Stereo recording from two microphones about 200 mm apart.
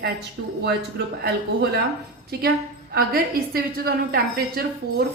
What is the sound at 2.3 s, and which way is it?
A woman's voice, 50° right (ahead or behind).